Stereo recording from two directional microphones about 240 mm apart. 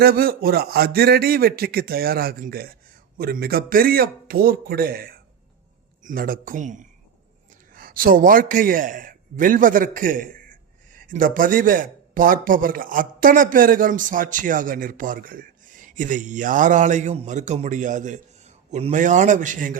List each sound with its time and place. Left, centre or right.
0.0 s a man's voice: right